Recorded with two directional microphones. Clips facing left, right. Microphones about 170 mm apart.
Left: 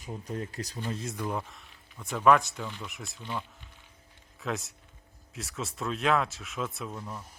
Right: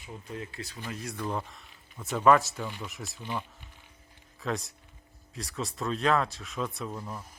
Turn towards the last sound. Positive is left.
turn(degrees=-5)  # may be behind; listen again after turning